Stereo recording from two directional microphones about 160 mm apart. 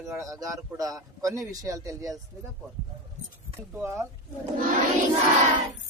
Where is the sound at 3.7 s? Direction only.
15° right (ahead or behind).